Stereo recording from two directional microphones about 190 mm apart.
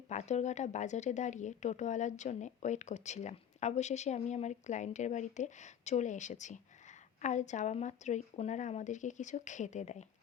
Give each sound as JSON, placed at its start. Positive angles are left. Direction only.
{"t": 0.1, "sound": "speech", "side_deg": 35}